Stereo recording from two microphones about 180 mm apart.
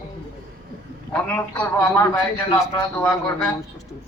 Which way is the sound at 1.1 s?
5° left (ahead or behind).